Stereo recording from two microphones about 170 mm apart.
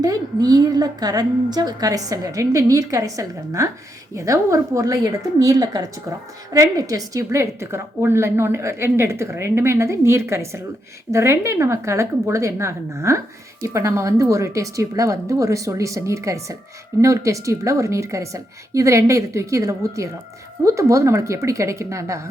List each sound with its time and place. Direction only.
0.0 s a woman's voice: 20° right (ahead or behind)